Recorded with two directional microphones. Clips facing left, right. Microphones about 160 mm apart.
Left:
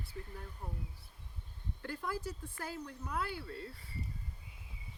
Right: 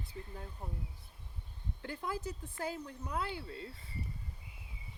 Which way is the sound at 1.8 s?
20° right (ahead or behind).